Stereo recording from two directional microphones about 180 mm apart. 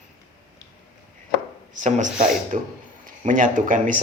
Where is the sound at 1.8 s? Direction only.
45° right (ahead or behind).